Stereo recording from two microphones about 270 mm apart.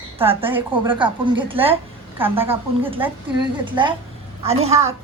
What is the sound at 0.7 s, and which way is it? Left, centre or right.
A woman's voice, centre.